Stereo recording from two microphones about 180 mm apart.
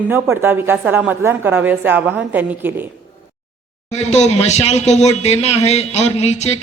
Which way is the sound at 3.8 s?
40° left (ahead or behind).